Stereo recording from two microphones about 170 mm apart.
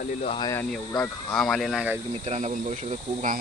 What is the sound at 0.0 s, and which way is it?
Speech, 45° left (ahead or behind).